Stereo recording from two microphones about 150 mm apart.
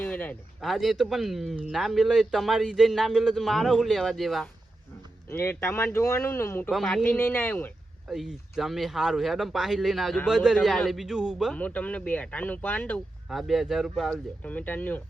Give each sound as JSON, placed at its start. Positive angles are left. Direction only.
{"t": 0.0, "sound": "a sound", "side_deg": 10}
{"t": 0.6, "sound": "a man's voice", "side_deg": 0}
{"t": 5.3, "sound": "speech", "side_deg": 15}
{"t": 6.7, "sound": "a man's voice", "side_deg": 0}
{"t": 7.0, "sound": "speech", "side_deg": 15}
{"t": 8.0, "sound": "a man's voice", "side_deg": -5}
{"t": 11.5, "sound": "speech", "side_deg": 10}
{"t": 13.2, "sound": "a man's voice", "side_deg": 0}